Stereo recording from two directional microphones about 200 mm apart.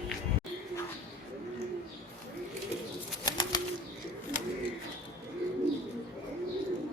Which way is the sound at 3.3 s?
20° left (ahead or behind).